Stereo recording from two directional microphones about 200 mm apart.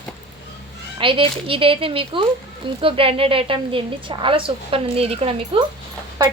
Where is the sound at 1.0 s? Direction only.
25° right (ahead or behind).